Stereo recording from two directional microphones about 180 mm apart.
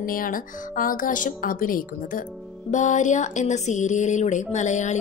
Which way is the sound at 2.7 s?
45° left (ahead or behind).